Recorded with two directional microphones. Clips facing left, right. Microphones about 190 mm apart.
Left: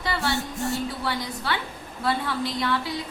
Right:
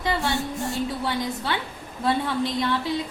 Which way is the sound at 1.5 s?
20° right (ahead or behind).